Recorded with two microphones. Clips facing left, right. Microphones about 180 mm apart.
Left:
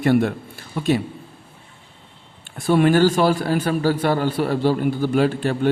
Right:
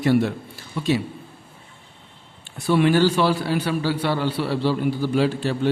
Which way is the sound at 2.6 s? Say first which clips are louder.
Left 2 dB; 50° left (ahead or behind).